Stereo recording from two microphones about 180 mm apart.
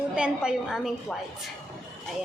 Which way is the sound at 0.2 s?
5° right (ahead or behind).